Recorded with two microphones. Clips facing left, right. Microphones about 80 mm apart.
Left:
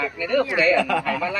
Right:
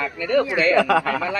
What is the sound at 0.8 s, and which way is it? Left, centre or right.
Speech, right.